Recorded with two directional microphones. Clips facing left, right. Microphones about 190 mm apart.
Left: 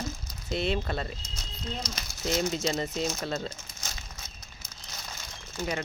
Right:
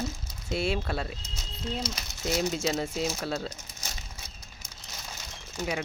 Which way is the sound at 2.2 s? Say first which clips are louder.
Even; 5° right (ahead or behind).